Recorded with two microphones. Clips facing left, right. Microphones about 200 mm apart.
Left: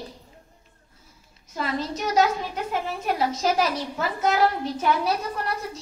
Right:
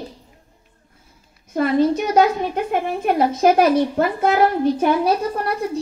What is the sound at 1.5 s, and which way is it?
A woman's voice, 55° right (ahead or behind).